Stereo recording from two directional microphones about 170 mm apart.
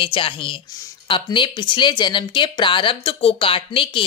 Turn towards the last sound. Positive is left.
turn(degrees=30)  # may be behind; listen again after turning